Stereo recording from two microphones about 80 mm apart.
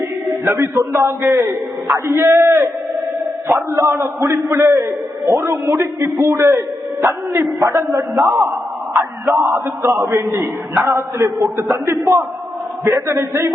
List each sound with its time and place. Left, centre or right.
0.3 s a man's voice: right
12.8 s a man's voice: right